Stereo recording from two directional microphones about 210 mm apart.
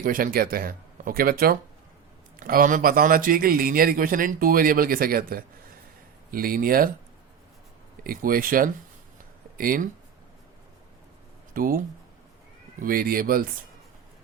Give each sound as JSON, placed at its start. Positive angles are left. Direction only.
{"t": 0.0, "sound": "speech", "side_deg": -40}
{"t": 8.0, "sound": "speech", "side_deg": -40}
{"t": 11.5, "sound": "speech", "side_deg": -40}
{"t": 12.8, "sound": "speech", "side_deg": -45}